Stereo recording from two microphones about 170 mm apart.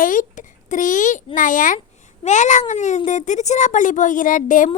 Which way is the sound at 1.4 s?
50° left (ahead or behind).